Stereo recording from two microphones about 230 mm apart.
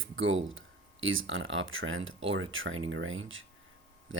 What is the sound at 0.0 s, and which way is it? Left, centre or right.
Speech, right.